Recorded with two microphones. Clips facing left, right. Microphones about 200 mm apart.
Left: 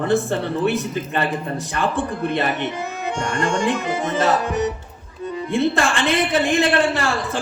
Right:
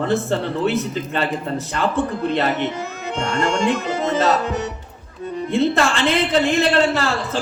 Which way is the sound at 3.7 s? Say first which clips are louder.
Right 1 dB; 15° left (ahead or behind).